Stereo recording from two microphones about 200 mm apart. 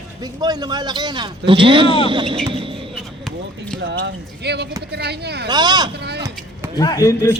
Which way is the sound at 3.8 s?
60° right (ahead or behind).